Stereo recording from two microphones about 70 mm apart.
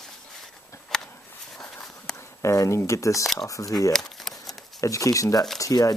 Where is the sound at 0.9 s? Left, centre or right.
Centre.